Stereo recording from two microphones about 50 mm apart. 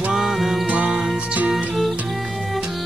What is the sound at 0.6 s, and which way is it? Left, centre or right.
Music, right.